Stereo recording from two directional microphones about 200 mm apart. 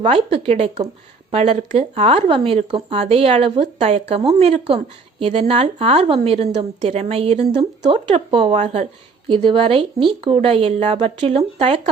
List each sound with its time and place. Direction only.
0.0 s a woman's voice: 30° right (ahead or behind)